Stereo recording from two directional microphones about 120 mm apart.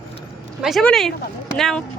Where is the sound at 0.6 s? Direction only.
Centre (ahead or behind).